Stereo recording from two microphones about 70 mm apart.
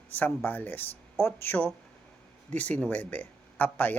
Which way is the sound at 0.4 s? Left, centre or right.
Left.